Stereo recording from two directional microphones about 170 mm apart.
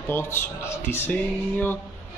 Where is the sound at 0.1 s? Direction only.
15° left (ahead or behind).